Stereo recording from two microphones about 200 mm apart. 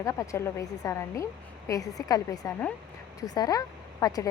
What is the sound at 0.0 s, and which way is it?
Speech, 15° left (ahead or behind).